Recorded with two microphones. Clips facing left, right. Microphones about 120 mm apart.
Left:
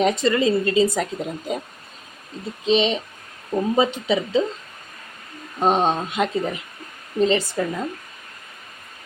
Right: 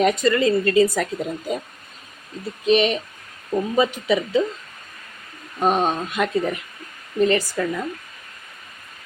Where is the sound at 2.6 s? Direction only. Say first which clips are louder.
Right 1 dB; 25° left (ahead or behind).